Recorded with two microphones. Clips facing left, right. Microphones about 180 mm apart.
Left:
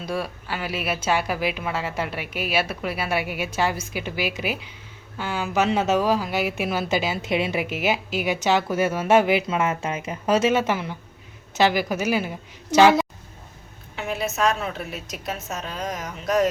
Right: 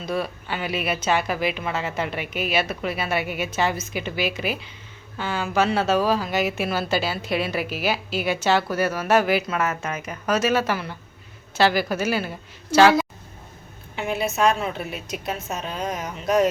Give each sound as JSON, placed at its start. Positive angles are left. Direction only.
{"t": 0.0, "sound": "speech", "side_deg": 10}
{"t": 13.9, "sound": "a woman's voice", "side_deg": 0}